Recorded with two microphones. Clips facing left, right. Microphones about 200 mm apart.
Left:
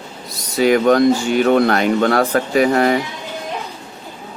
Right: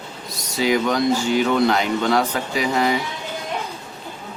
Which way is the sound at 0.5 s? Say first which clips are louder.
Left 7 dB; 55° left (ahead or behind).